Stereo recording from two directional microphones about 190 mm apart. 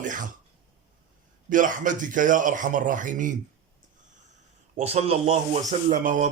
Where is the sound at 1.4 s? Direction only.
45° right (ahead or behind).